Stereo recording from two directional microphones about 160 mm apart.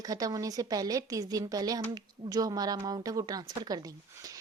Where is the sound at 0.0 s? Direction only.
25° right (ahead or behind).